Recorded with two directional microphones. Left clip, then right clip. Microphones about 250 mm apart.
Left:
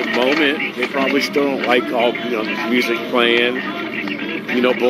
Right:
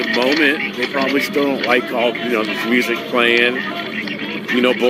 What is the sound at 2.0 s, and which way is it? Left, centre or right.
Speech, right.